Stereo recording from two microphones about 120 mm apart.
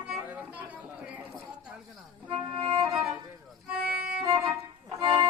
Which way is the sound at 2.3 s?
45° right (ahead or behind).